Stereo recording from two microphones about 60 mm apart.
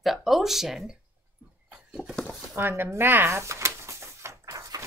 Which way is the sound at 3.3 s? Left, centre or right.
Right.